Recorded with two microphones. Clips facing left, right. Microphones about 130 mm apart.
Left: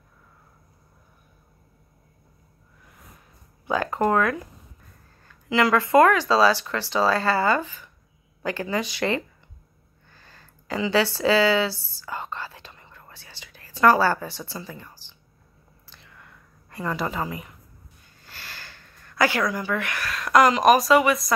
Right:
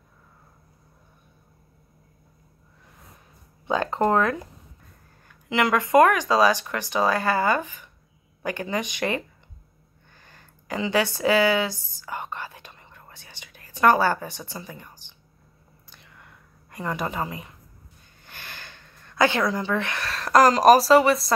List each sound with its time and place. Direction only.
3.6 s speech: 25° right (ahead or behind)
5.5 s speech: 20° right (ahead or behind)
10.1 s a sound: 20° right (ahead or behind)